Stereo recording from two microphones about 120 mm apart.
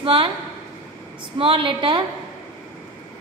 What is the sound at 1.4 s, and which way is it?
Speech, 45° right (ahead or behind).